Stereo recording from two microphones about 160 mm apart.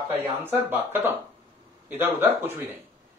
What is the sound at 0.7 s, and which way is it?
Speech, 10° right (ahead or behind).